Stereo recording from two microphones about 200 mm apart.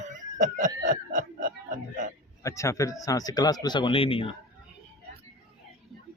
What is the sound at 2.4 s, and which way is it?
Speech, 15° left (ahead or behind).